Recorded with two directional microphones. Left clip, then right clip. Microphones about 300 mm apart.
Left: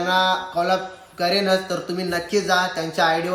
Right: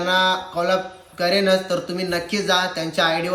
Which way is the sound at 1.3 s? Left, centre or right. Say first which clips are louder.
Right 2 dB; centre.